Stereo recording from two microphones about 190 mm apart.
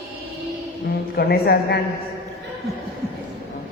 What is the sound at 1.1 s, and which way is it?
Chant, 55° left (ahead or behind).